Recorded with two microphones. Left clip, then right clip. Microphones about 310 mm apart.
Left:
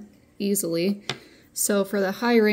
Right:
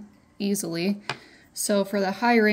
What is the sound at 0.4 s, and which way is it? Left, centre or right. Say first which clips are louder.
Speech: left 3 dB; centre.